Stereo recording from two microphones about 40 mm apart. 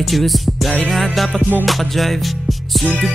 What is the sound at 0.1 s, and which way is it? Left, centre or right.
Music, centre.